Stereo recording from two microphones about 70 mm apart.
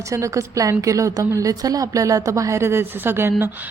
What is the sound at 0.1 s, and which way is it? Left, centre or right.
A woman's voice, right.